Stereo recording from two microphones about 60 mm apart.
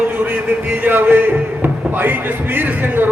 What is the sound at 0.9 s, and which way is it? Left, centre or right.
A man's voice, right.